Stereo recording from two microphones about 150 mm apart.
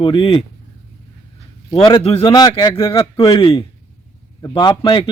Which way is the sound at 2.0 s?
40° left (ahead or behind).